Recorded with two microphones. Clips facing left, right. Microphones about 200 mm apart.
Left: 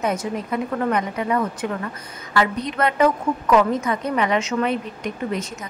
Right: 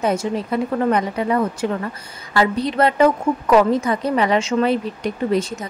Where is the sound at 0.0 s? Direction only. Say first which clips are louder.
Right 4 dB; 30° right (ahead or behind).